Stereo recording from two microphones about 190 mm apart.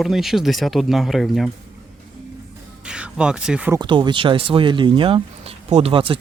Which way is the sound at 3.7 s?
25° right (ahead or behind).